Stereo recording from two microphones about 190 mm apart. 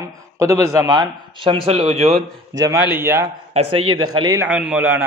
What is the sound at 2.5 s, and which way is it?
Speech, 20° right (ahead or behind).